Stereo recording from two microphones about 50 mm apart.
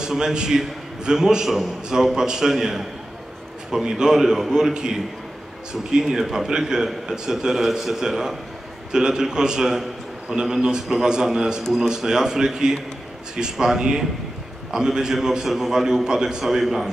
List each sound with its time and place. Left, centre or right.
0.0 s a man's voice: centre